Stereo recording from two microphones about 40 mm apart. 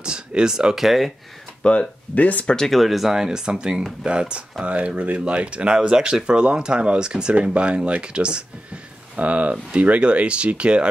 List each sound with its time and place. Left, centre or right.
0.0 s a sound: right
0.7 s speech: centre
1.6 s speech: left
2.1 s speech: left
2.4 s speech: centre
2.7 s speech: centre
3.2 s speech: centre
9.1 s speech: right